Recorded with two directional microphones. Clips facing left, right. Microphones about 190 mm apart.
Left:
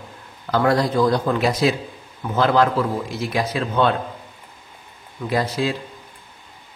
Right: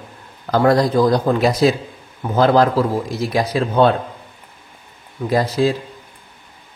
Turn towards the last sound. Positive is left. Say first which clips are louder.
# right 5 dB
turn(degrees=-40)  # may be behind; listen again after turning